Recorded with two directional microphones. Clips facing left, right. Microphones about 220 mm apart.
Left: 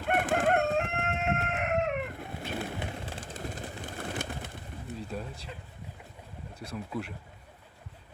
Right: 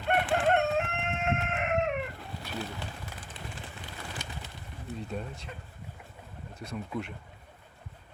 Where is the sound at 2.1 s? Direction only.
55° left (ahead or behind).